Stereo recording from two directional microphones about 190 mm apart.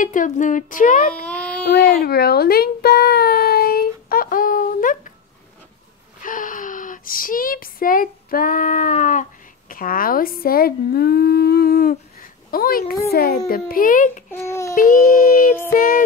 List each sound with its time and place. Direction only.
0.0 s speech: 45° left (ahead or behind)
1.2 s a sound: 5° left (ahead or behind)
2.0 s a child's voice: 55° left (ahead or behind)
6.2 s a child's voice: 45° left (ahead or behind)
14.3 s a sound: 15° left (ahead or behind)
14.8 s speech: 45° left (ahead or behind)